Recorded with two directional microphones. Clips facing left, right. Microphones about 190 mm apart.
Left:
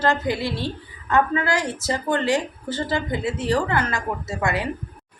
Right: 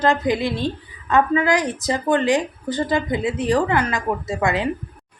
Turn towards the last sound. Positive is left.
turn(degrees=-20)  # may be behind; listen again after turning